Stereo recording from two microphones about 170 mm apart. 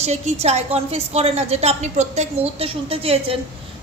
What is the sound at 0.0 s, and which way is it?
A woman's voice, 40° right (ahead or behind).